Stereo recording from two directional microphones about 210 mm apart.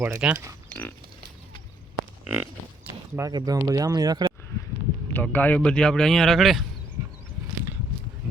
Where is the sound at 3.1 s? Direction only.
15° right (ahead or behind).